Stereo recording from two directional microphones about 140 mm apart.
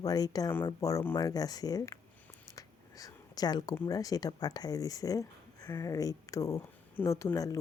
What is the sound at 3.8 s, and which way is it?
Speech, 25° left (ahead or behind).